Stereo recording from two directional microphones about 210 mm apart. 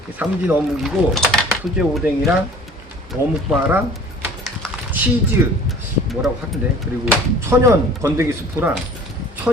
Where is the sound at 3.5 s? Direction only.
10° right (ahead or behind).